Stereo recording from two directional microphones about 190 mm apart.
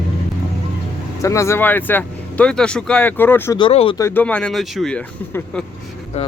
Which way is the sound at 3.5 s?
30° left (ahead or behind).